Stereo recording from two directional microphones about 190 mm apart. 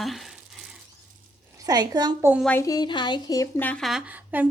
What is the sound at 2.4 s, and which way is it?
A woman's voice, 15° left (ahead or behind).